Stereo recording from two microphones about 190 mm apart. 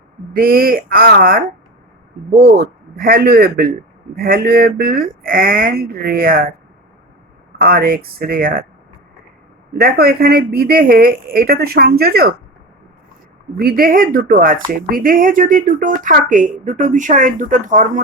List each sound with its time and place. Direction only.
0.3 s speech: 50° right (ahead or behind)
7.6 s speech: 50° right (ahead or behind)
9.8 s speech: 55° right (ahead or behind)
13.6 s speech: 50° right (ahead or behind)